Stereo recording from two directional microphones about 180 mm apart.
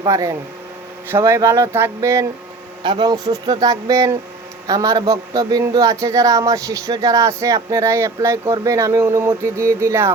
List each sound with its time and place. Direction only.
0.0 s a man's voice: 20° right (ahead or behind)